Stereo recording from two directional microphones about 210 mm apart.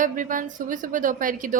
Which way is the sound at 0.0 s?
40° right (ahead or behind).